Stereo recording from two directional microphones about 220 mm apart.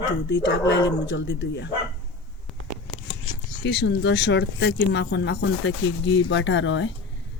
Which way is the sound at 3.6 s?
50° left (ahead or behind).